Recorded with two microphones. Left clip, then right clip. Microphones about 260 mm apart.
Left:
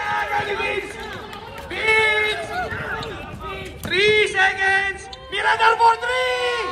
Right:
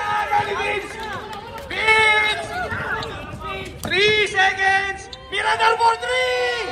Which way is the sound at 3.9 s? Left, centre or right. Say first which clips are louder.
Even; centre.